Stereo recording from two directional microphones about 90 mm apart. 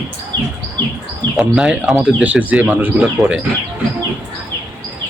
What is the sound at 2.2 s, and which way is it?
Speech, 15° right (ahead or behind).